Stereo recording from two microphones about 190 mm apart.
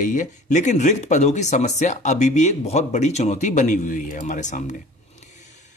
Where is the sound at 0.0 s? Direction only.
40° left (ahead or behind).